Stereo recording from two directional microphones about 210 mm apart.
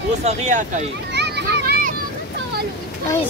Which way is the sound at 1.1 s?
55° right (ahead or behind).